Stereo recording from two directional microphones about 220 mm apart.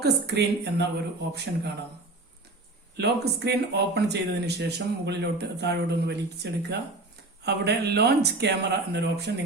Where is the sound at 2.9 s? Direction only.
50° right (ahead or behind).